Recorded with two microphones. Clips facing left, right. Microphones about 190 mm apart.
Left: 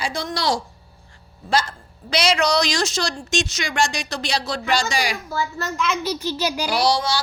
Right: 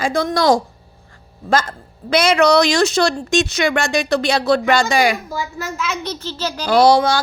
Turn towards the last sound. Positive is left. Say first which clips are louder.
# right 8 dB
turn(degrees=-55)  # may be behind; listen again after turning